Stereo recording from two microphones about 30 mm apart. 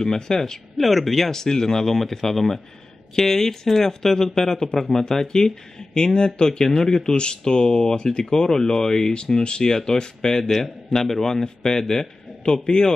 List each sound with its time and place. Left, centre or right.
0.0 s speech: centre
0.7 s speech: centre
1.3 s speech: centre
6.6 s speech: centre
9.4 s speech: left
9.7 s speech: left
10.6 s a man's voice: centre